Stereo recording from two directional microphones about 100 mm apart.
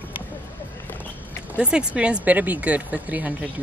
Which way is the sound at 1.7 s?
10° right (ahead or behind).